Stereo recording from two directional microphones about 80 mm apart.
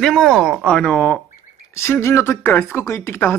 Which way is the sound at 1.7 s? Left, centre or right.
Left.